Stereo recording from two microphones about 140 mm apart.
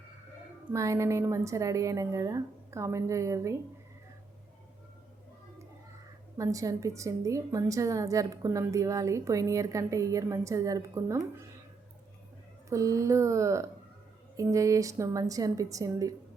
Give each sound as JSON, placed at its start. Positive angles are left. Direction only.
{"t": 0.7, "sound": "a woman's voice", "side_deg": -20}
{"t": 6.3, "sound": "a woman's voice", "side_deg": -25}
{"t": 12.6, "sound": "a woman's voice", "side_deg": -25}